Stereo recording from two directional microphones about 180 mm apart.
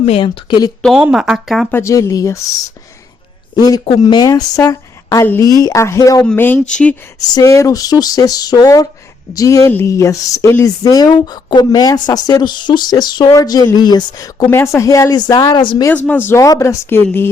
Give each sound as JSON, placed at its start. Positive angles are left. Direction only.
{"t": 0.0, "sound": "speech", "side_deg": 30}
{"t": 0.8, "sound": "speech", "side_deg": 0}
{"t": 1.7, "sound": "speech", "side_deg": 15}
{"t": 3.5, "sound": "speech", "side_deg": 20}
{"t": 7.3, "sound": "speech", "side_deg": 15}
{"t": 15.9, "sound": "speech", "side_deg": 10}